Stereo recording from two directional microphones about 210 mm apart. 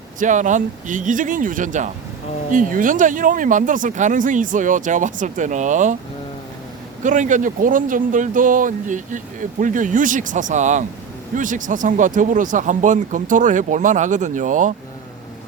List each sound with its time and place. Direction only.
0.2 s speech: 35° right (ahead or behind)
7.0 s speech: 35° right (ahead or behind)